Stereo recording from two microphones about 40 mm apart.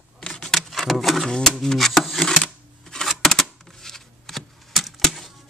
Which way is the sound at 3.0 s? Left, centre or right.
Centre.